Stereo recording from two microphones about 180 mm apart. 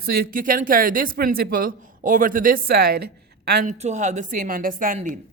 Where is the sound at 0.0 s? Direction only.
55° right (ahead or behind).